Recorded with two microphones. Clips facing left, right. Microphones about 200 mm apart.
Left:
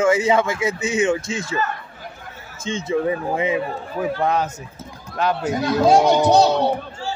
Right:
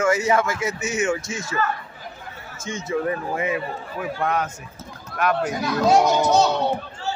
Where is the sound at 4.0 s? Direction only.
30° left (ahead or behind).